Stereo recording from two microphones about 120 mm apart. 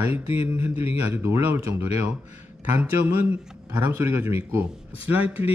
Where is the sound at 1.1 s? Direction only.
20° right (ahead or behind).